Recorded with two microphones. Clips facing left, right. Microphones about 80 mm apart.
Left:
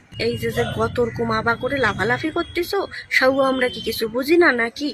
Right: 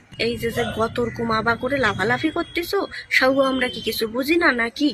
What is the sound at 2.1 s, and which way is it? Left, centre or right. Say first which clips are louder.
Speech: even; centre.